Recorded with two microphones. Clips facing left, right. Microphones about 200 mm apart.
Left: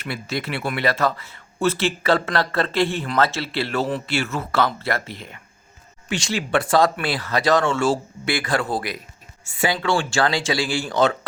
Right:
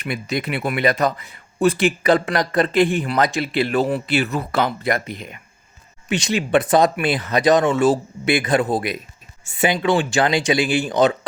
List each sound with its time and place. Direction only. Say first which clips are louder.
0.0 s speech: right 3 dB; 15° right (ahead or behind)